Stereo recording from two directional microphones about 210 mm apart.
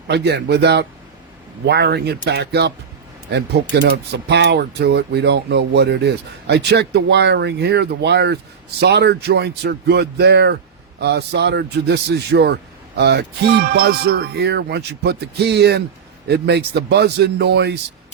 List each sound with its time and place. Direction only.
0.1 s speech: 55° right (ahead or behind)